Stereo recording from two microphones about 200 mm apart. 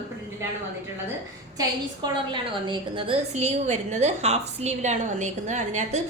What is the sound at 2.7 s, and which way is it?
A woman's voice, 25° right (ahead or behind).